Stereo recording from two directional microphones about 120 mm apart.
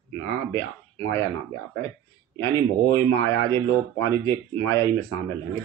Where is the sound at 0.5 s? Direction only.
25° left (ahead or behind).